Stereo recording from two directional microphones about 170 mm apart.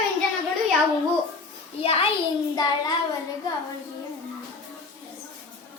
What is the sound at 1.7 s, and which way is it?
Speech, 35° left (ahead or behind).